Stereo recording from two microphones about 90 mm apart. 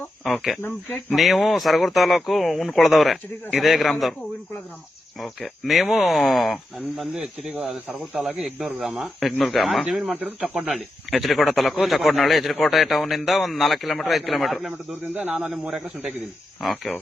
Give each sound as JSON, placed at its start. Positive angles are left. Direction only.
{"t": 0.6, "sound": "speech", "side_deg": 25}
{"t": 1.1, "sound": "speech", "side_deg": 0}
{"t": 5.2, "sound": "speech", "side_deg": 0}
{"t": 15.0, "sound": "a man's voice", "side_deg": -15}
{"t": 15.4, "sound": "a man's voice", "side_deg": -5}